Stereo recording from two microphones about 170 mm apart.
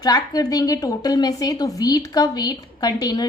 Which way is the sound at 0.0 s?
25° left (ahead or behind).